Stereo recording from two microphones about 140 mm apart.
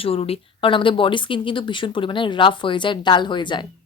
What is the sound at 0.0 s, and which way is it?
A woman's voice, 45° left (ahead or behind).